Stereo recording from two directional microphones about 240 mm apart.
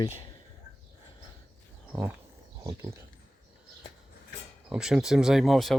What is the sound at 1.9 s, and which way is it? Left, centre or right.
Speech, centre.